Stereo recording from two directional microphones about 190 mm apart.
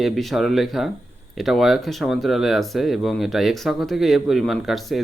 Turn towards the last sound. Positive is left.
turn(degrees=0)  # may be behind; listen again after turning